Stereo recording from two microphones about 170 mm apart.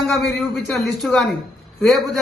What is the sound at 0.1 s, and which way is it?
A man's voice, centre (ahead or behind).